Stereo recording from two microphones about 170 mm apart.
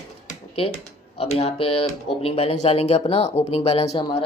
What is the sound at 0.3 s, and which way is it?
Computer keyboard, 35° left (ahead or behind).